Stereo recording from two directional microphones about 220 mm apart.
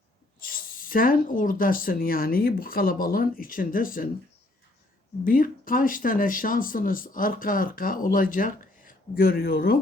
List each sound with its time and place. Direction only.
0.4 s speech: 40° left (ahead or behind)
5.2 s speech: 40° left (ahead or behind)